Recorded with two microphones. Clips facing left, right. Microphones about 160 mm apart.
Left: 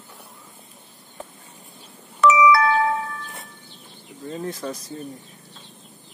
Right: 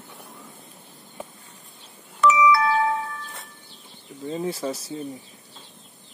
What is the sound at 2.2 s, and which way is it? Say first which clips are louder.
Doorbell: left 2 dB; 90° left.